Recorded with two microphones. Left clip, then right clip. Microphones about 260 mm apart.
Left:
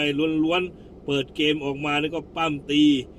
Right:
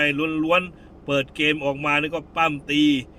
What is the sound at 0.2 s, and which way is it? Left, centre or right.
A man's voice, right.